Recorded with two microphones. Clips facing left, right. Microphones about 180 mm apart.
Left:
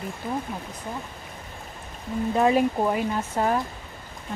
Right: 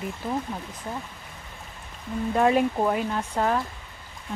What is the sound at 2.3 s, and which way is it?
Speech, 5° left (ahead or behind).